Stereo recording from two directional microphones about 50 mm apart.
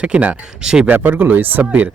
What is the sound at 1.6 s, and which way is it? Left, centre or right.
Speech, right.